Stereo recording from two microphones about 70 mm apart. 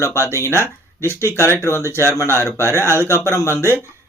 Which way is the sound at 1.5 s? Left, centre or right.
Left.